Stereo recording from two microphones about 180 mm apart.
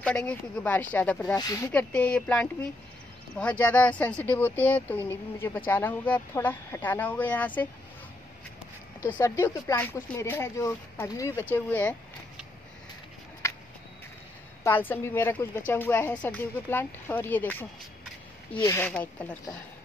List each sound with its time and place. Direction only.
0.0 s a woman's voice: 5° left (ahead or behind)
1.3 s speech: 20° left (ahead or behind)
1.6 s a woman's voice: 10° left (ahead or behind)
9.0 s a woman's voice: 15° left (ahead or behind)
14.6 s a woman's voice: 10° left (ahead or behind)